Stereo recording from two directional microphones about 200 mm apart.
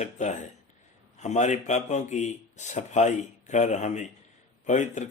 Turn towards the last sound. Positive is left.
turn(degrees=35)  # may be behind; listen again after turning